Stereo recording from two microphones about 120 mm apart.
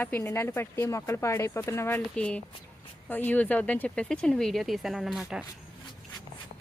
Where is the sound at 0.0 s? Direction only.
15° left (ahead or behind).